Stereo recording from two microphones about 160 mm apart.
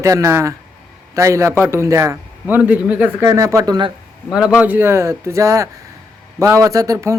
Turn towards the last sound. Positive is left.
turn(degrees=-20)  # may be behind; listen again after turning